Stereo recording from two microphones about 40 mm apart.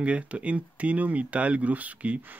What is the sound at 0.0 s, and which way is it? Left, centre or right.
Speech, right.